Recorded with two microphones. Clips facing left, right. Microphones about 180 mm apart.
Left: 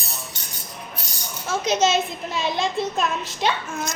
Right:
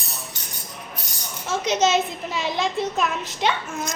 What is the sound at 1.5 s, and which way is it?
A woman's voice, 20° right (ahead or behind).